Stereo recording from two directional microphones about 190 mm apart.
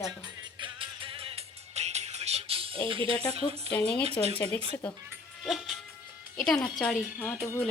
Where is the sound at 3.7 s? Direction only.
5° left (ahead or behind).